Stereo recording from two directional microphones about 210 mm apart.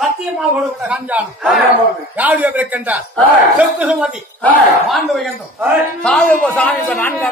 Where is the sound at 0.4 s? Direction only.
5° right (ahead or behind).